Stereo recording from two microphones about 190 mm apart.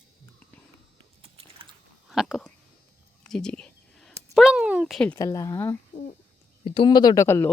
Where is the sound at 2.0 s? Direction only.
Centre (ahead or behind).